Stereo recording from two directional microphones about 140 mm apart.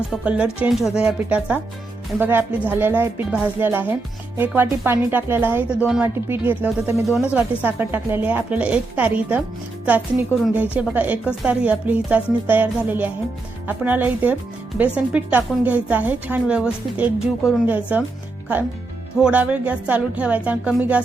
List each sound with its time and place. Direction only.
0.1 s a woman's voice: 5° right (ahead or behind)
7.2 s a woman's voice: 10° right (ahead or behind)
19.2 s a woman's voice: 10° right (ahead or behind)